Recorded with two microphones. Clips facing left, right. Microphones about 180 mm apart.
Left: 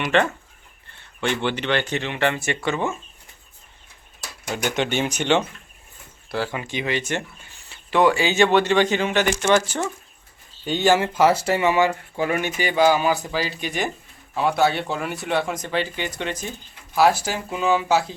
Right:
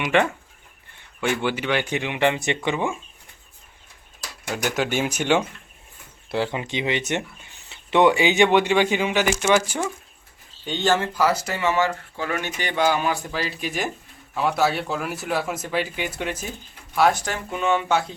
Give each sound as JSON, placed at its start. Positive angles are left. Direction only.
{"t": 0.0, "sound": "speech", "side_deg": -10}
{"t": 4.5, "sound": "speech", "side_deg": -5}
{"t": 6.3, "sound": "speech", "side_deg": -20}
{"t": 10.7, "sound": "speech", "side_deg": 10}
{"t": 11.1, "sound": "speech", "side_deg": 25}
{"t": 11.6, "sound": "speech", "side_deg": 15}
{"t": 16.9, "sound": "speech", "side_deg": 5}